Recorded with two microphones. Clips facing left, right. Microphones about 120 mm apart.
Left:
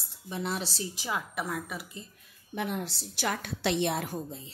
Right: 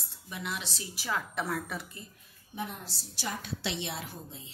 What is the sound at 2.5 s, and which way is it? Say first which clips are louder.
A woman's voice: left 6 dB; 70° left (ahead or behind).